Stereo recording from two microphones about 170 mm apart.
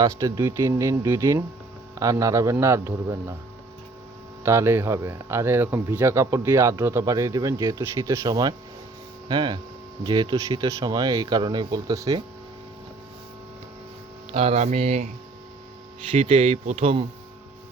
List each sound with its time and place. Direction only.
0.0 s speech: 20° right (ahead or behind)
4.4 s speech: 15° right (ahead or behind)
14.3 s speech: 40° right (ahead or behind)
16.1 s speech: 35° right (ahead or behind)